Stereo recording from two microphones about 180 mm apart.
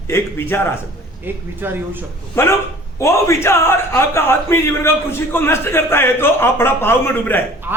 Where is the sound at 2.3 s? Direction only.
15° left (ahead or behind).